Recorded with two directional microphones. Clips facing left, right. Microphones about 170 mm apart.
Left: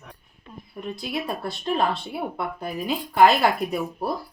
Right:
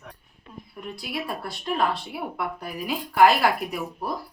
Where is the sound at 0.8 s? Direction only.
20° left (ahead or behind).